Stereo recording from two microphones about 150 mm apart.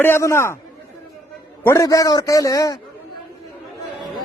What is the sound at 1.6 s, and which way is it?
A man's voice, 20° left (ahead or behind).